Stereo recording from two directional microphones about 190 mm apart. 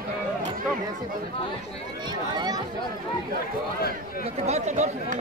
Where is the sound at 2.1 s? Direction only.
20° right (ahead or behind).